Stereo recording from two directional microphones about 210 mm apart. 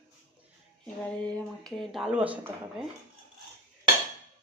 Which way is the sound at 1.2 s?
Centre (ahead or behind).